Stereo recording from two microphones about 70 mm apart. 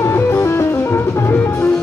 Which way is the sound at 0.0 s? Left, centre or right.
Left.